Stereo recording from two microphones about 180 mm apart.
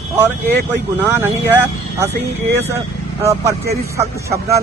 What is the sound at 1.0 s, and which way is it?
Speech, 10° right (ahead or behind).